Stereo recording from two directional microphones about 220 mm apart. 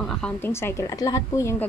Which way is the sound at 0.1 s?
5° left (ahead or behind).